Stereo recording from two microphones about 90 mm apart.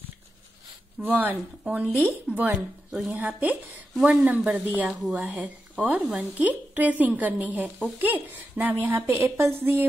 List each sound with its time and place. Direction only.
1.0 s a woman's voice: 20° right (ahead or behind)
4.8 s a woman's voice: 5° right (ahead or behind); by 8.7 s 20° right (ahead or behind)
8.8 s a woman's voice: 30° right (ahead or behind)